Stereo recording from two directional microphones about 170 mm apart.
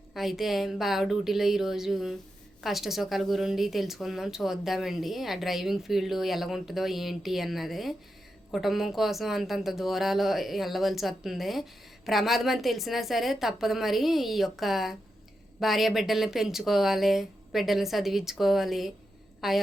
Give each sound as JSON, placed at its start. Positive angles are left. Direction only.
{"t": 0.1, "sound": "a woman's voice", "side_deg": 0}